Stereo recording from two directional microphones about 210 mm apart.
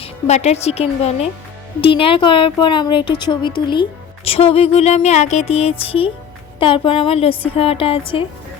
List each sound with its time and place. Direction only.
0.0 s speech: 30° left (ahead or behind)